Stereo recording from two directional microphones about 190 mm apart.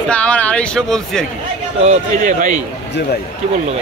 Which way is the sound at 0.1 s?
5° left (ahead or behind).